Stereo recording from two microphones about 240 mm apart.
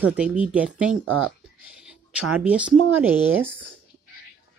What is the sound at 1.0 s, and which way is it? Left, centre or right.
Speech, right.